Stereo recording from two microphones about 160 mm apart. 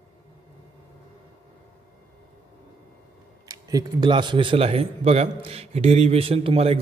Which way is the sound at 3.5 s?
25° right (ahead or behind).